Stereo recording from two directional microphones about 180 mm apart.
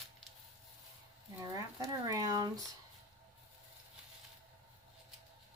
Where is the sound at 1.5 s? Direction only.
20° right (ahead or behind).